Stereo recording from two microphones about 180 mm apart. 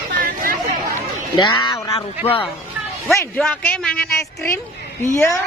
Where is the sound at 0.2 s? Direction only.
55° right (ahead or behind).